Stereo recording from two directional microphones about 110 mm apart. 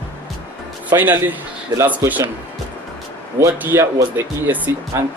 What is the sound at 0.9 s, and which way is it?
Speech, 20° right (ahead or behind).